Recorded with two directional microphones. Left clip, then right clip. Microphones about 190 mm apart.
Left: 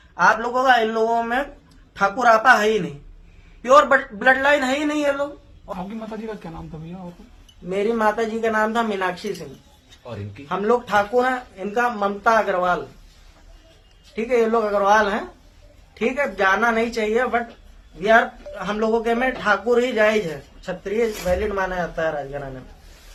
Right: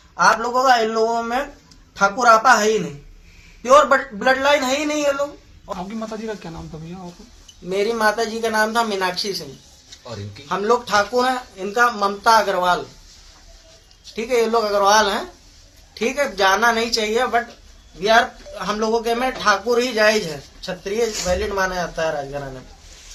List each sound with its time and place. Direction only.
0.2 s speech: 5° left (ahead or behind)
6.1 s speech: 25° right (ahead or behind)
7.7 s speech: centre (ahead or behind)
10.5 s speech: centre (ahead or behind)
14.2 s speech: centre (ahead or behind)